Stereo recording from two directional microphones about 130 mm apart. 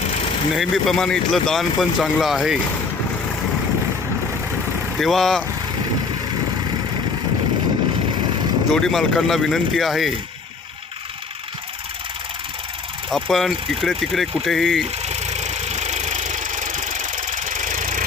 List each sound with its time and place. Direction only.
0.5 s speech: centre (ahead or behind)
4.9 s speech: centre (ahead or behind)
8.7 s speech: centre (ahead or behind)
13.1 s speech: centre (ahead or behind)
15.0 s engine: 60° right (ahead or behind); by 18.0 s 90° right